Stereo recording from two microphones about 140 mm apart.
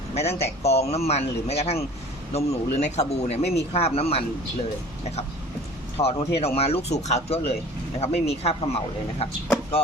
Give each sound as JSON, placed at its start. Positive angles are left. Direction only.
{"t": 0.1, "sound": "speech", "side_deg": 50}
{"t": 6.0, "sound": "speech", "side_deg": 45}
{"t": 9.8, "sound": "speech", "side_deg": 45}